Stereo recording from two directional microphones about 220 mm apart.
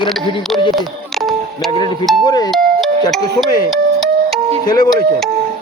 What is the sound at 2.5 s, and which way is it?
Doorbell, centre (ahead or behind).